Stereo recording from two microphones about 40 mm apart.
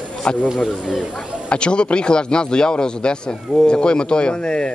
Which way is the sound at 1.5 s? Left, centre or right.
Left.